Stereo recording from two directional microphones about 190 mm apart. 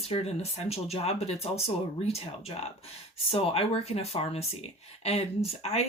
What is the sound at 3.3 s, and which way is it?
Speech, 30° left (ahead or behind).